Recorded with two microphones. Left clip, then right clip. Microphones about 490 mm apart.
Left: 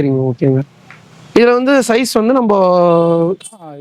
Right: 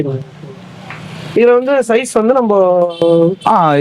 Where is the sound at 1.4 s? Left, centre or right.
Left.